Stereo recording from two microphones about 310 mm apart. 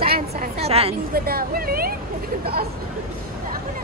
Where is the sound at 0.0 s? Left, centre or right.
Right.